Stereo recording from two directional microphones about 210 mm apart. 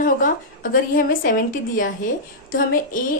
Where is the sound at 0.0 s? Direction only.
40° left (ahead or behind).